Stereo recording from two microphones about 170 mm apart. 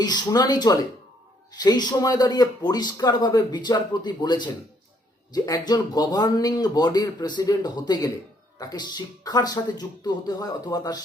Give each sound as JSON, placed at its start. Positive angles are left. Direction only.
{"t": 0.0, "sound": "speech", "side_deg": 25}